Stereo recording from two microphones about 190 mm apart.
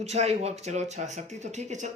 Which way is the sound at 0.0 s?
35° right (ahead or behind).